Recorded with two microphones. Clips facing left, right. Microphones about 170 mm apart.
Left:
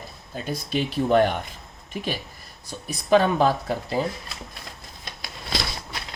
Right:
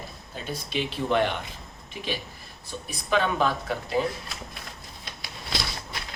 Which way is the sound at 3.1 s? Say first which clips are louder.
Left 6 dB; 40° left (ahead or behind).